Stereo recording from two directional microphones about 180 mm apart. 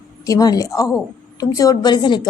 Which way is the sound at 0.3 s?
20° left (ahead or behind).